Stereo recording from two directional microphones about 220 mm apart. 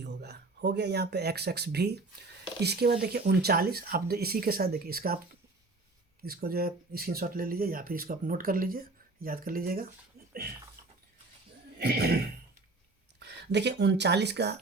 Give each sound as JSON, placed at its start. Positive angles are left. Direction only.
{"t": 0.0, "sound": "speech", "side_deg": -50}
{"t": 6.2, "sound": "speech", "side_deg": -45}
{"t": 11.8, "sound": "speech", "side_deg": -45}
{"t": 13.1, "sound": "speech", "side_deg": -50}